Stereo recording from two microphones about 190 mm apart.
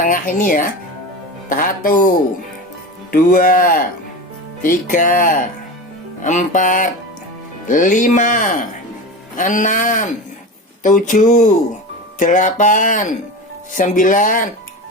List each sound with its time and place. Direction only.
0.0 s speech: 45° left (ahead or behind)
3.1 s speech: 45° left (ahead or behind)